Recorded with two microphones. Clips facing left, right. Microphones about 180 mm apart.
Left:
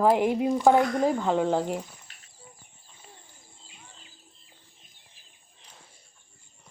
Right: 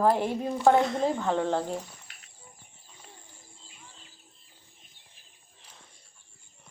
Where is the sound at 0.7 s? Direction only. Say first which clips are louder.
Left 2 dB; 25° right (ahead or behind).